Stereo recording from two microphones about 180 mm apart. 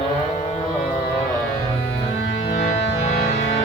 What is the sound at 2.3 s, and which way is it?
Music, 40° left (ahead or behind).